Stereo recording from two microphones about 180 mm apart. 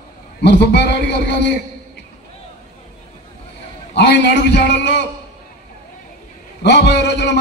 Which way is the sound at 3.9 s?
70° left (ahead or behind).